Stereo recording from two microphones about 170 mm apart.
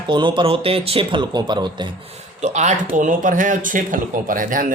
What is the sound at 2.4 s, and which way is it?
Speech, 45° right (ahead or behind).